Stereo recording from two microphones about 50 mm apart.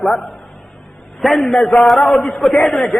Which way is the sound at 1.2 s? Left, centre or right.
Centre.